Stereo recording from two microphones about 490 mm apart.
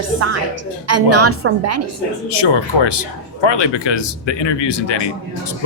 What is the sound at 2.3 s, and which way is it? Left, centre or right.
Speech, left.